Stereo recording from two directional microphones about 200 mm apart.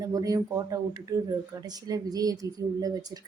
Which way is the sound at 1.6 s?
20° right (ahead or behind).